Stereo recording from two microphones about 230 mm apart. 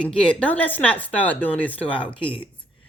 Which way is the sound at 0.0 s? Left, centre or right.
Centre.